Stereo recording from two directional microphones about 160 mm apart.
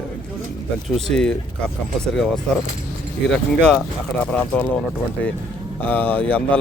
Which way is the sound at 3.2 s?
5° left (ahead or behind).